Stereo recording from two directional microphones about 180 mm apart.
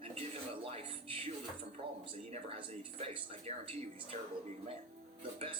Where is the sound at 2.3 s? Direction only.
35° right (ahead or behind).